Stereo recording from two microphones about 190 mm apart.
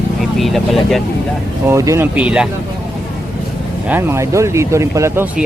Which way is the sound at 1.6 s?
15° right (ahead or behind).